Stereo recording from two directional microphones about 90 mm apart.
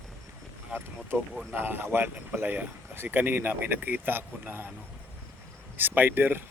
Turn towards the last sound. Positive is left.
turn(degrees=-25)  # may be behind; listen again after turning